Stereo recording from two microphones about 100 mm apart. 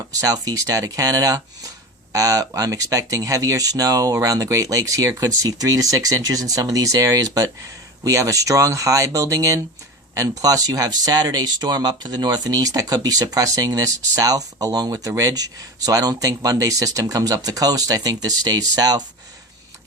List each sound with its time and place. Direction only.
0.2 s speech: 35° right (ahead or behind)